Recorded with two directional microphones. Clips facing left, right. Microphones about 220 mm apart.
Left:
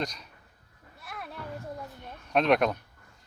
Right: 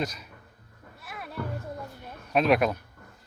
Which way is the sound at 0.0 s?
5° right (ahead or behind).